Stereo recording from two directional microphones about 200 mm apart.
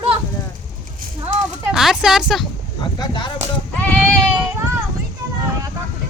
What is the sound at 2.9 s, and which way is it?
Speech, 20° left (ahead or behind).